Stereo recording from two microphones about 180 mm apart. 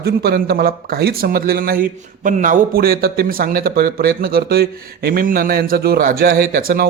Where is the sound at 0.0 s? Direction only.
60° right (ahead or behind).